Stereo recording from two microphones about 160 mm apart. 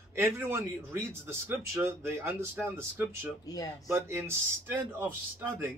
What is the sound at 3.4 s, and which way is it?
Speech, 25° left (ahead or behind).